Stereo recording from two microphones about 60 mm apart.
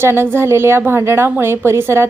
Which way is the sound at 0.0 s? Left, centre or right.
Right.